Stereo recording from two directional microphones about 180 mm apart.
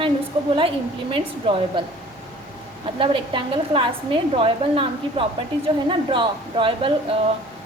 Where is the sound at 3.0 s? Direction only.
30° right (ahead or behind).